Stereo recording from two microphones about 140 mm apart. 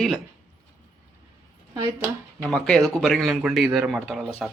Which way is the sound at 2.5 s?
5° left (ahead or behind).